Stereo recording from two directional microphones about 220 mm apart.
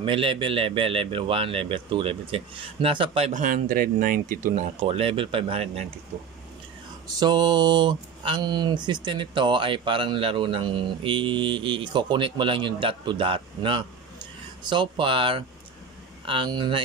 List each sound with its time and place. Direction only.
0.0 s speech: 25° right (ahead or behind)
4.8 s speech: 25° right (ahead or behind)
7.2 s speech: 20° right (ahead or behind)